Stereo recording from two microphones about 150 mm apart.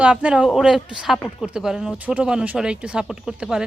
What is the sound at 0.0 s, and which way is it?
A woman's voice, 10° right (ahead or behind).